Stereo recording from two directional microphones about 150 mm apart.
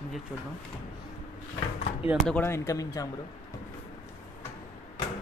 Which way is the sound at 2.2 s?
15° left (ahead or behind).